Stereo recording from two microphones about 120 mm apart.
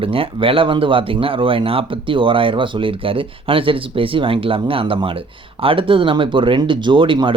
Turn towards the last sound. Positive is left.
turn(degrees=-45)  # may be behind; listen again after turning